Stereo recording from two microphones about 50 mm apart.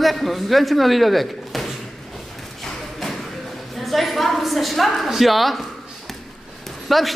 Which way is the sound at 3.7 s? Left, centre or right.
Centre.